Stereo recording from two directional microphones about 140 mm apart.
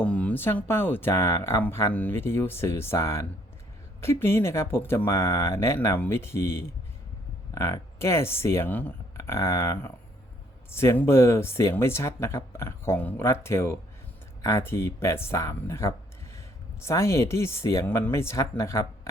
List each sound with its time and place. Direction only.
0.0 s speech: 10° left (ahead or behind)